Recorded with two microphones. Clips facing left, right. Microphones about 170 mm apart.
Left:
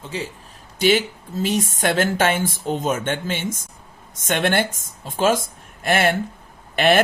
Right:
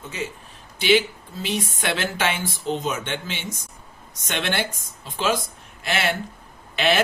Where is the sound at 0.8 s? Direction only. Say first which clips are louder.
Left 1 dB; 45° left (ahead or behind).